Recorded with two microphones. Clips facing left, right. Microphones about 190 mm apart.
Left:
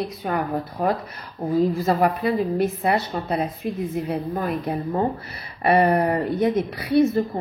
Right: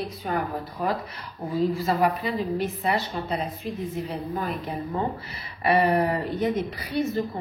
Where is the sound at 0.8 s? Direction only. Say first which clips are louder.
Left 3 dB; 50° left (ahead or behind).